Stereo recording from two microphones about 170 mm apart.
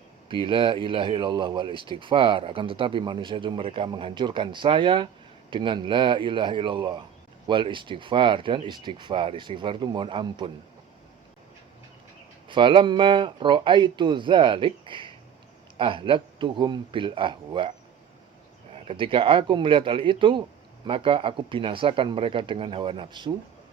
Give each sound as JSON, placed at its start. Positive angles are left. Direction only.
{"t": 0.3, "sound": "speech", "side_deg": -30}
{"t": 12.5, "sound": "speech", "side_deg": -30}
{"t": 18.7, "sound": "speech", "side_deg": -35}